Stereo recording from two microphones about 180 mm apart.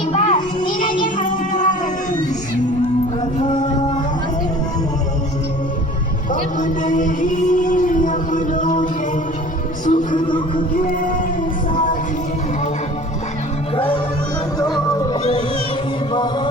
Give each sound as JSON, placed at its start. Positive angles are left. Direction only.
{"t": 0.1, "sound": "a sound", "side_deg": 40}
{"t": 0.7, "sound": "music", "side_deg": 45}
{"t": 3.3, "sound": "music", "side_deg": 40}
{"t": 6.6, "sound": "music", "side_deg": 45}
{"t": 10.2, "sound": "music", "side_deg": 25}
{"t": 13.7, "sound": "music", "side_deg": 30}
{"t": 15.2, "sound": "music", "side_deg": 35}
{"t": 16.1, "sound": "chant", "side_deg": 25}